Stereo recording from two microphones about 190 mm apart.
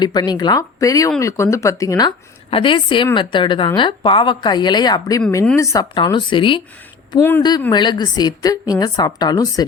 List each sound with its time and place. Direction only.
0.0 s a woman's voice: 20° left (ahead or behind)
7.2 s speech: 10° left (ahead or behind)
7.7 s a woman's voice: 25° left (ahead or behind)